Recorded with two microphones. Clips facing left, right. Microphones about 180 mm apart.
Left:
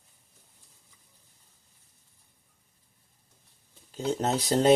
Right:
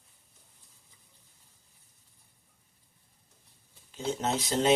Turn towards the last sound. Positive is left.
turn(degrees=40)  # may be behind; listen again after turning